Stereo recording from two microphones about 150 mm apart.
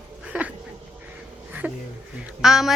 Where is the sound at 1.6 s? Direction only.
10° right (ahead or behind).